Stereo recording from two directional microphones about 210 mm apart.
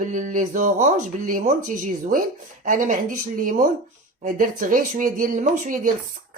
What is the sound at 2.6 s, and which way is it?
Speech, 40° right (ahead or behind).